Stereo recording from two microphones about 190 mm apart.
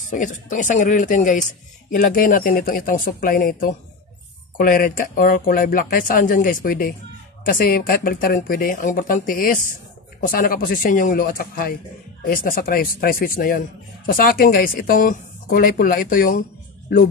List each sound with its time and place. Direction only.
0.1 s a man's voice: 40° left (ahead or behind)